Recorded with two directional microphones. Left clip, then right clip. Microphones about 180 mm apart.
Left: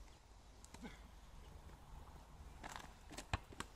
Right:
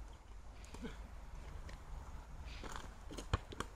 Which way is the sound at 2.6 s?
25° left (ahead or behind).